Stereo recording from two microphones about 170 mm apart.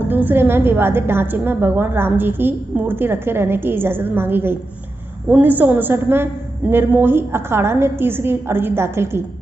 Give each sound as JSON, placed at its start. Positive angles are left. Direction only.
{"t": 0.1, "sound": "a woman's voice", "side_deg": -10}